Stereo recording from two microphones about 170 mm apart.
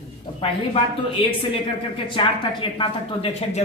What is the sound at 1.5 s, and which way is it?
A woman's voice, 30° left (ahead or behind).